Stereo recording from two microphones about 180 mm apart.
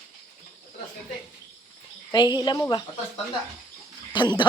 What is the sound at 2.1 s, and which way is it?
Speech, 25° left (ahead or behind).